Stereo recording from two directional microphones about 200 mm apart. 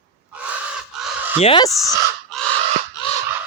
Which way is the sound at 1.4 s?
25° left (ahead or behind).